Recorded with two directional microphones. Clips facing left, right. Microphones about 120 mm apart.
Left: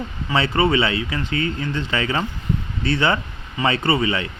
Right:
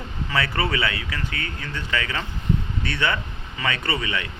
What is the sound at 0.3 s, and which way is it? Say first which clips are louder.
Speech: left 6 dB; 25° left (ahead or behind).